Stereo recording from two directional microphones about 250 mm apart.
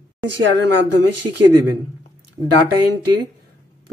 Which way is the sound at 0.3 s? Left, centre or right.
Right.